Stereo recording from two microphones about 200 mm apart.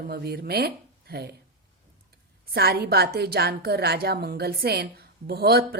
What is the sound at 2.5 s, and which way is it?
A woman's voice, 50° right (ahead or behind).